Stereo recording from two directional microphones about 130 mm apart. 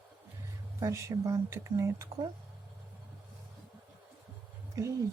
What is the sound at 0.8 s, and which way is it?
Speech, 25° right (ahead or behind).